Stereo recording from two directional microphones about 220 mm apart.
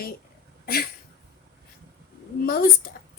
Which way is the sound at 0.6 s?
40° left (ahead or behind).